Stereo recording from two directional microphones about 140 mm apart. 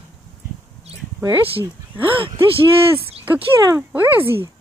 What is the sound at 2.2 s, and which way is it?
Speech, 40° right (ahead or behind).